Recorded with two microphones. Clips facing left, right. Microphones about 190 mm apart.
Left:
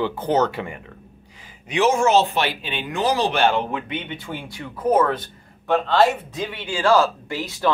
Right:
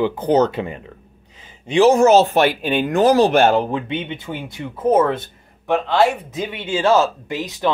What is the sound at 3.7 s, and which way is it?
Speech, 25° right (ahead or behind).